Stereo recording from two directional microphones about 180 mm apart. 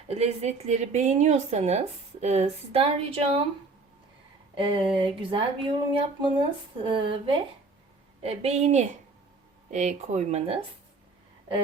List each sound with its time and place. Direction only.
0.1 s speech: 35° right (ahead or behind)
4.5 s a sound: 30° right (ahead or behind)
8.2 s speech: 35° right (ahead or behind)